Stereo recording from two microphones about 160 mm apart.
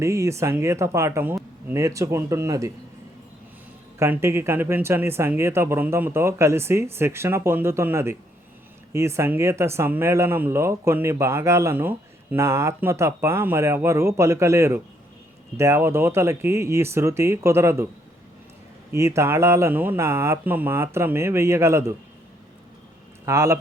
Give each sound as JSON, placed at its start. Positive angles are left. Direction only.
{"t": 0.0, "sound": "a man's voice", "side_deg": -20}
{"t": 4.0, "sound": "speech", "side_deg": -15}
{"t": 18.9, "sound": "speech", "side_deg": -15}
{"t": 23.2, "sound": "a man's voice", "side_deg": -20}